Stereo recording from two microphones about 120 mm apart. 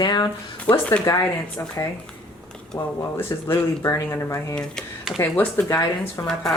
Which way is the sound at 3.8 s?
25° left (ahead or behind).